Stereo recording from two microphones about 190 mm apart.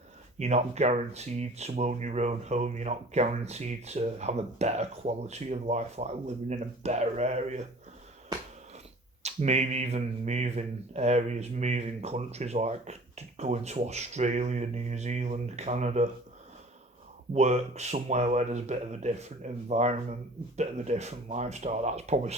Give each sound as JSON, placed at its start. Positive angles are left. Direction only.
{"t": 0.3, "sound": "speech", "side_deg": -35}
{"t": 9.2, "sound": "speech", "side_deg": -35}
{"t": 17.3, "sound": "speech", "side_deg": -35}